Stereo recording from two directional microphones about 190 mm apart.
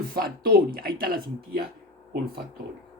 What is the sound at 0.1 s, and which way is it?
Speech, 50° right (ahead or behind).